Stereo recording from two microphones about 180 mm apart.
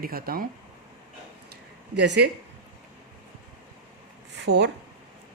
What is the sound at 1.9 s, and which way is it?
Speech, 70° right (ahead or behind).